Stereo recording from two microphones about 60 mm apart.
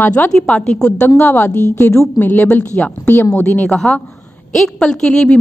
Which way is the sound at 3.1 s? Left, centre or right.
Left.